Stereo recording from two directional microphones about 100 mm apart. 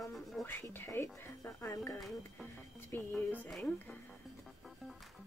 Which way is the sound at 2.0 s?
Centre (ahead or behind).